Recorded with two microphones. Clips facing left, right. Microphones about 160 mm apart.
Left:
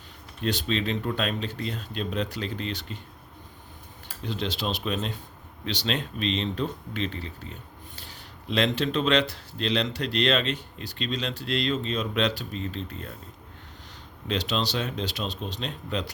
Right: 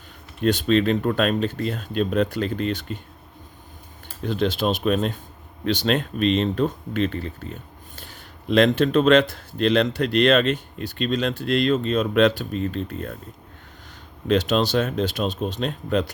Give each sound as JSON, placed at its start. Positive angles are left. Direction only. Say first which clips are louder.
{"t": 0.4, "sound": "speech", "louder": "right 8 dB", "side_deg": -50}
{"t": 4.2, "sound": "speech", "louder": "right 8 dB", "side_deg": -50}
{"t": 14.3, "sound": "speech", "louder": "right 8 dB", "side_deg": -50}